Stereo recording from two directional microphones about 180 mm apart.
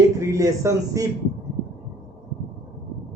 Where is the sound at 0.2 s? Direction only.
15° right (ahead or behind).